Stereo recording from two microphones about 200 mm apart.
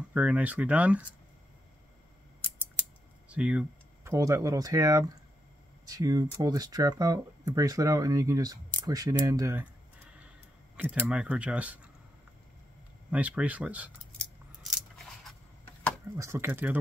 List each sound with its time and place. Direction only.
0.1 s speech: 5° right (ahead or behind)
3.3 s speech: 5° right (ahead or behind)
11.1 s speech: 5° right (ahead or behind)
13.1 s speech: 5° right (ahead or behind)
14.1 s scissors: centre (ahead or behind)
16.2 s speech: 10° right (ahead or behind)